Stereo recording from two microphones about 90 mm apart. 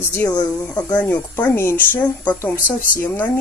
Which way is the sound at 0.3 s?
45° left (ahead or behind).